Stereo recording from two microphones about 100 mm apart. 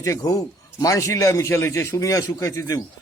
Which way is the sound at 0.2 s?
40° left (ahead or behind).